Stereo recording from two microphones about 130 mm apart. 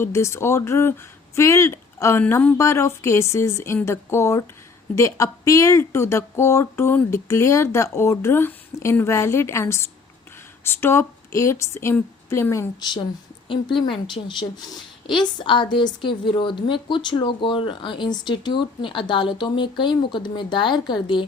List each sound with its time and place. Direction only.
0.0 s a woman's voice: 20° left (ahead or behind)
12.8 s a woman's voice: 35° left (ahead or behind)